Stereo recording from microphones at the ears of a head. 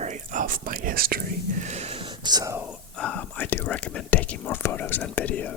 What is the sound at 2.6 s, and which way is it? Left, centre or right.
Speech, left.